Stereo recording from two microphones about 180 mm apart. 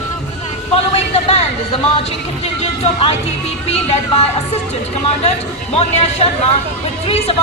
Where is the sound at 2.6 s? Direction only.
40° left (ahead or behind).